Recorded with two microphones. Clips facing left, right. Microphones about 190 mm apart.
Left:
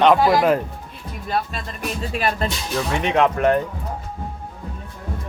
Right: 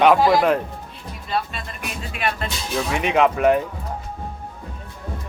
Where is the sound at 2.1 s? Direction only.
35° left (ahead or behind).